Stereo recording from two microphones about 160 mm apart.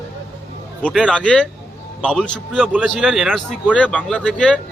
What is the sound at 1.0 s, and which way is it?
A man's voice, 5° left (ahead or behind).